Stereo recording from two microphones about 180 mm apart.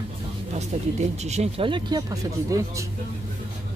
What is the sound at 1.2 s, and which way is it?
Speech, 35° right (ahead or behind).